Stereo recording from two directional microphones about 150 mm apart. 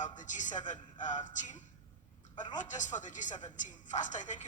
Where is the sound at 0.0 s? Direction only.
55° left (ahead or behind).